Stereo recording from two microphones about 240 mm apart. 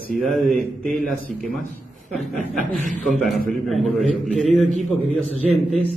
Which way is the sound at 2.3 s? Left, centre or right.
Right.